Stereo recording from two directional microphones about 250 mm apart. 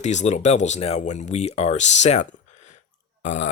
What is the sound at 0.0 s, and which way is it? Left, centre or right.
Speech, left.